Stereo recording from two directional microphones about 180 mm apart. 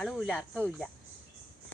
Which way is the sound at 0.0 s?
Centre (ahead or behind).